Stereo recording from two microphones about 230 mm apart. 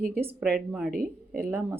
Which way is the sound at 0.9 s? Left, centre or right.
Right.